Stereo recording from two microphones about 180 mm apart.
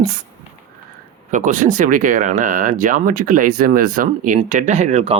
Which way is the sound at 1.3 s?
45° right (ahead or behind).